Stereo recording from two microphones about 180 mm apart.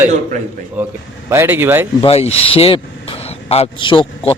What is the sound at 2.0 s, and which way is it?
Speech, 35° left (ahead or behind).